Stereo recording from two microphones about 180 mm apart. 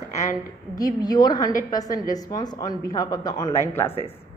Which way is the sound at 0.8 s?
20° left (ahead or behind).